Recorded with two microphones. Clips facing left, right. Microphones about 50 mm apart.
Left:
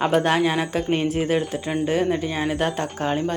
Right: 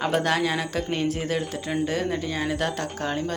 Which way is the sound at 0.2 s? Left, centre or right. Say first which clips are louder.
Left 4 dB; left.